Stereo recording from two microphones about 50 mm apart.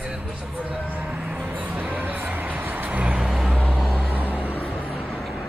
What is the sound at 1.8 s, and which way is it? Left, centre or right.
Vehicle, right.